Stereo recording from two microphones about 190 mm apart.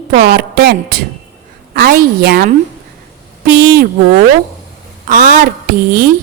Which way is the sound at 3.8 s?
45° right (ahead or behind).